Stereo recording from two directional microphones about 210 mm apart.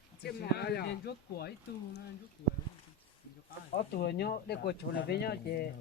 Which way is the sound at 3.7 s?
50° left (ahead or behind).